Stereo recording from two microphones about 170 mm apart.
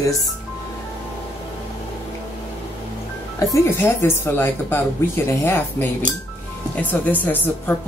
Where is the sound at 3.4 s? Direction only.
15° left (ahead or behind).